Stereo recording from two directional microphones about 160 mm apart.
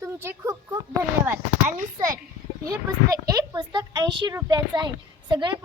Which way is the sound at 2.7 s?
20° right (ahead or behind).